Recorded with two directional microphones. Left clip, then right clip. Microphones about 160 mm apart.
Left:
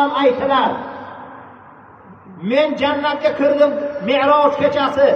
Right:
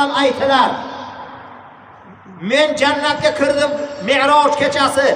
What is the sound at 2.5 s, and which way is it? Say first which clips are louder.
A man's voice: right 2 dB; 35° right (ahead or behind).